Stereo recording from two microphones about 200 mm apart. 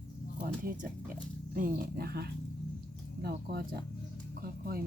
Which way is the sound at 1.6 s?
50° right (ahead or behind).